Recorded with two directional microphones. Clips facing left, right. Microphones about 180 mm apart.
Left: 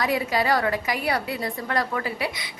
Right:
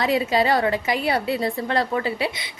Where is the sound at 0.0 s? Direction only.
25° right (ahead or behind).